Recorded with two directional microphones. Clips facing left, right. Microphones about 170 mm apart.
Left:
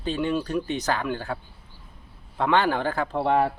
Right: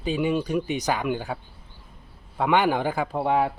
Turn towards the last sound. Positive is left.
turn(degrees=-5)  # may be behind; listen again after turning